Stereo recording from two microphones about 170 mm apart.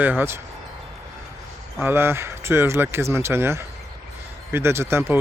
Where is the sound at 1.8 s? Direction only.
10° right (ahead or behind).